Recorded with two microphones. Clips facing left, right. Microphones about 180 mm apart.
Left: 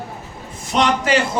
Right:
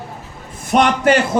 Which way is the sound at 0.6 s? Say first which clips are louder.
Right 5 dB; 55° right (ahead or behind).